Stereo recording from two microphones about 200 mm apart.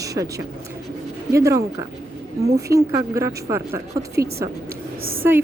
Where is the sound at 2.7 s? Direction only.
15° right (ahead or behind).